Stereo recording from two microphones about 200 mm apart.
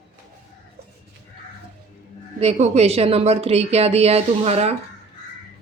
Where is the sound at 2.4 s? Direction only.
30° right (ahead or behind).